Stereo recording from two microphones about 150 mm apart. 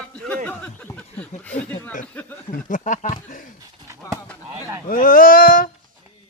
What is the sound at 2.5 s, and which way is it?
Speech, 60° left (ahead or behind).